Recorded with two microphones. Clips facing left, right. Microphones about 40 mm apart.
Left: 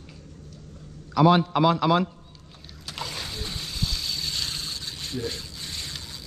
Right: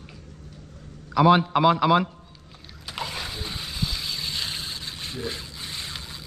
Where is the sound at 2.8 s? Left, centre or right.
Centre.